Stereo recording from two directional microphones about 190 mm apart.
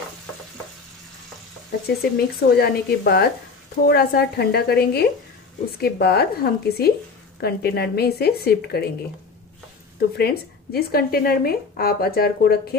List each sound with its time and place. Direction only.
2.0 s speech: 55° left (ahead or behind)
9.9 s speech: 55° left (ahead or behind)